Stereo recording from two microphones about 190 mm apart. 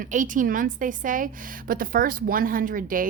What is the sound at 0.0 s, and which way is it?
A woman's voice, 45° right (ahead or behind).